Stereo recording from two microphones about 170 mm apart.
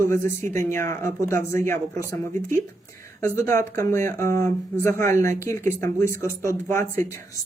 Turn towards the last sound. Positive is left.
turn(degrees=15)  # may be behind; listen again after turning